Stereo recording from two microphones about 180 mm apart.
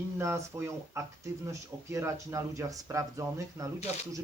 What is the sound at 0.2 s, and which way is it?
Speech, 15° right (ahead or behind).